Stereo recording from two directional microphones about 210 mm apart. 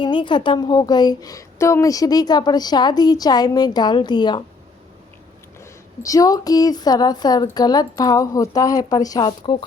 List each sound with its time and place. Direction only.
0.0 s a woman's voice: 20° left (ahead or behind)
5.5 s speech: 15° left (ahead or behind)